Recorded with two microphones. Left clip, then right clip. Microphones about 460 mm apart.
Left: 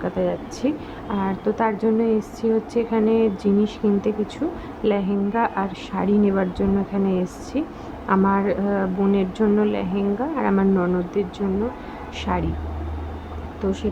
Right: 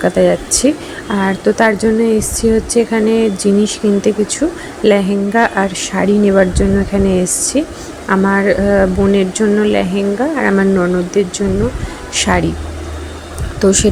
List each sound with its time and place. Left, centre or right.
0.0 s speech: left
13.6 s speech: left